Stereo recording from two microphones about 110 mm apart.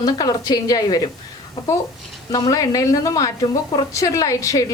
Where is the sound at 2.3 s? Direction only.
35° left (ahead or behind).